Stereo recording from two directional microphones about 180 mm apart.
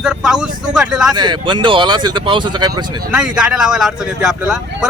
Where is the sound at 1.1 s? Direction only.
25° right (ahead or behind).